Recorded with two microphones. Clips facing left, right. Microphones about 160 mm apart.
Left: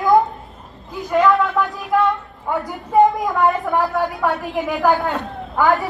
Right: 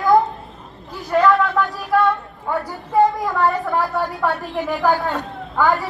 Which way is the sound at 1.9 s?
15° left (ahead or behind).